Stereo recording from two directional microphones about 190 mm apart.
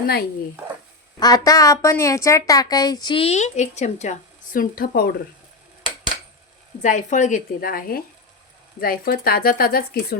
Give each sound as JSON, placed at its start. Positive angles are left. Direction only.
{"t": 1.2, "sound": "a woman's voice", "side_deg": 20}
{"t": 4.5, "sound": "speech", "side_deg": 50}
{"t": 6.8, "sound": "speech", "side_deg": 40}